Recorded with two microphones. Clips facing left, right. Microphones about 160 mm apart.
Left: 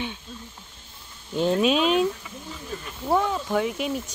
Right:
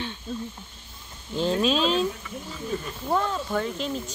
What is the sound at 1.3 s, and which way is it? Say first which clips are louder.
Speech: left 2 dB; 10° left (ahead or behind).